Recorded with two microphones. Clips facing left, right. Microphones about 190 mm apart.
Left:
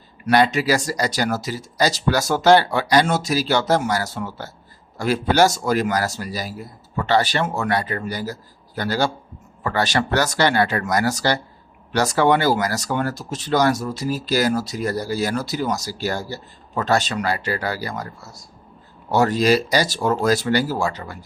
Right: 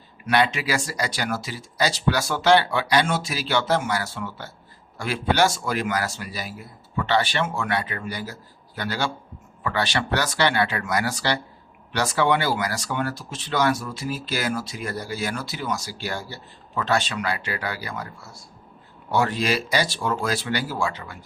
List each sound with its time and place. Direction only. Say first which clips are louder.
0.3 s speech: left 5 dB; 40° left (ahead or behind)